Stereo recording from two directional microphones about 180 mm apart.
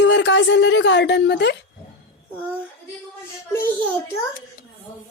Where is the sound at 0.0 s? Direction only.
85° left; by 1.5 s 70° left (ahead or behind).